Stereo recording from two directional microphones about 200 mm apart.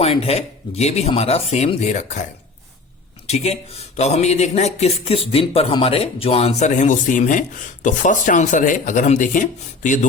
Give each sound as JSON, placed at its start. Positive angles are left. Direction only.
{"t": 0.0, "sound": "speech", "side_deg": 30}
{"t": 3.2, "sound": "speech", "side_deg": 30}